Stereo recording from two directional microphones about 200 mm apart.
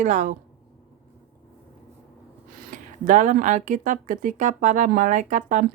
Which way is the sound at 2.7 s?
40° right (ahead or behind).